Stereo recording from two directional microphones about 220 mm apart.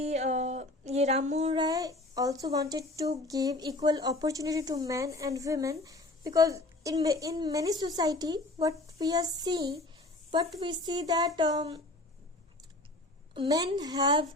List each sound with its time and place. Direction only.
0.0 s a sound: 30° right (ahead or behind)
10.6 s a woman's voice: 20° right (ahead or behind)
13.3 s a woman's voice: 20° right (ahead or behind)